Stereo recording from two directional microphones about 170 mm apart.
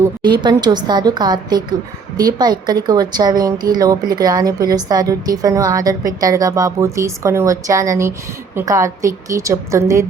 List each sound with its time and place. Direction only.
0.2 s a woman's voice: 25° right (ahead or behind)